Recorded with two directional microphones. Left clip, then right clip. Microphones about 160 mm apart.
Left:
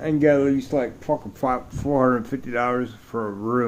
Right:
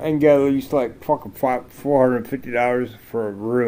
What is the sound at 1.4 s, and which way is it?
Speech, 10° left (ahead or behind).